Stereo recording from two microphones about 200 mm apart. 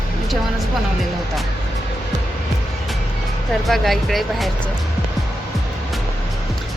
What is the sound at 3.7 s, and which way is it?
Speech, centre (ahead or behind).